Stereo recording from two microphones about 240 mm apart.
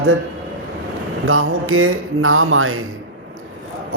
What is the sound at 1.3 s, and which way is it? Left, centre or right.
Speech, right.